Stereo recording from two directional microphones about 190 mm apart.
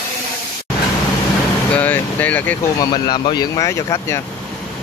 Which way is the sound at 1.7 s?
10° left (ahead or behind).